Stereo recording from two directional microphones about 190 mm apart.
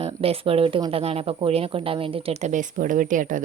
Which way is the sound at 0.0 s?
30° right (ahead or behind).